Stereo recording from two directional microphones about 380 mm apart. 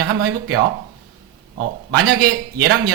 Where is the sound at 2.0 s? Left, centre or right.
Right.